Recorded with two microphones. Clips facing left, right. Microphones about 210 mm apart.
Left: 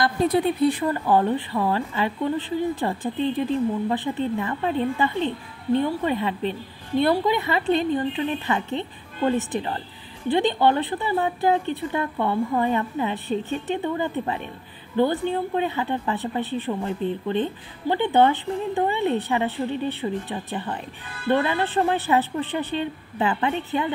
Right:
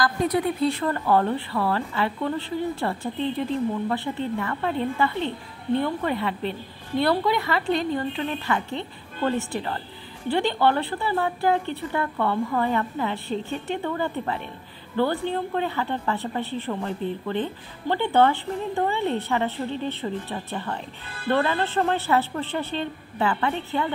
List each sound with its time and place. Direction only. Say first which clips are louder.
0.0 s speech: left 2 dB; 25° left (ahead or behind)
0.7 s a woman's voice: left 1 dB; 15° left (ahead or behind)